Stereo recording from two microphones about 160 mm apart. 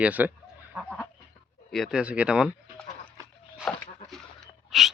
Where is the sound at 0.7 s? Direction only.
5° left (ahead or behind).